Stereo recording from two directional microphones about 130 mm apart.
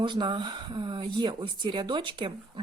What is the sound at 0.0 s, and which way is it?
Speech, 35° right (ahead or behind).